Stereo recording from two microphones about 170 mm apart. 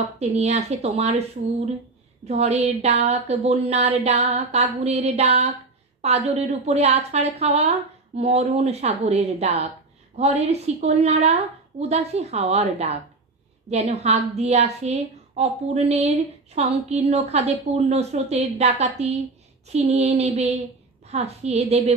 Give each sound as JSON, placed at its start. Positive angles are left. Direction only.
{"t": 0.2, "sound": "a woman's voice", "side_deg": -40}
{"t": 2.2, "sound": "a woman's voice", "side_deg": -40}